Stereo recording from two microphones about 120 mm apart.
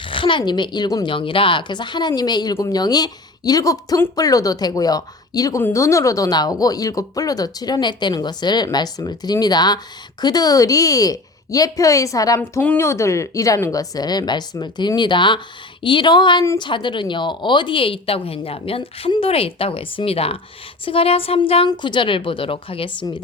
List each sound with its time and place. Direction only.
0.0 s speech: 45° left (ahead or behind)
1.0 s speech: 45° left (ahead or behind); by 12.4 s 30° left (ahead or behind)
12.4 s a woman's voice: 15° left (ahead or behind); by 21.7 s 50° left (ahead or behind)
21.7 s a woman's voice: 40° left (ahead or behind)